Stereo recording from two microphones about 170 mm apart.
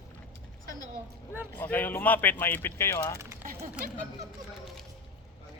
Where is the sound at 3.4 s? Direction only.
55° right (ahead or behind).